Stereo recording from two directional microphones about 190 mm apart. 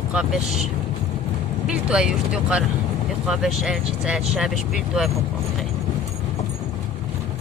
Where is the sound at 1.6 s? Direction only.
5° right (ahead or behind).